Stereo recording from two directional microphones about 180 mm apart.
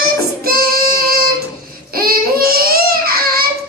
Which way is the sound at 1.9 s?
55° right (ahead or behind).